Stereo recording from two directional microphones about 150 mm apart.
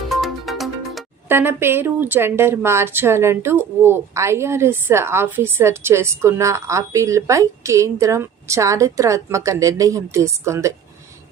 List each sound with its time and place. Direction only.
0.1 s music: centre (ahead or behind)
1.3 s speech: 15° right (ahead or behind)